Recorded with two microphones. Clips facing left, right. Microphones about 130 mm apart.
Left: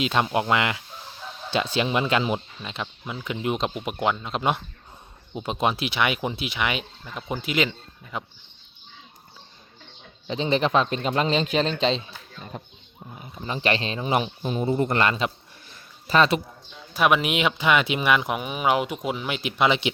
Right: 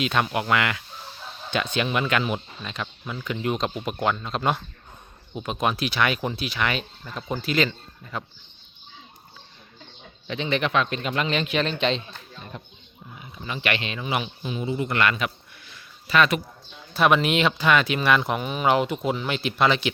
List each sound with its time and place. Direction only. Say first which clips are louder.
0.0 s speech: left 1 dB; 25° left (ahead or behind)
10.2 s speech: left 3 dB; 35° left (ahead or behind)
13.1 s speech: left 2 dB; 35° left (ahead or behind)
15.7 s a sound: left 1 dB; 35° left (ahead or behind)
16.9 s speech: right 1 dB; 10° left (ahead or behind)